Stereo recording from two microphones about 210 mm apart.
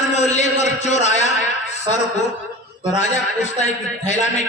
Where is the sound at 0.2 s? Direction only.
35° left (ahead or behind).